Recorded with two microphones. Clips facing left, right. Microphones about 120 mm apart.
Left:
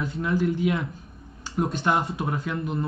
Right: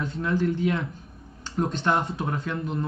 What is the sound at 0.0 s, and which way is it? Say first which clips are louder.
A man's voice: left 1 dB; 5° left (ahead or behind).